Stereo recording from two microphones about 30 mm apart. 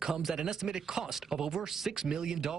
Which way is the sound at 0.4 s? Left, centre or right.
Centre.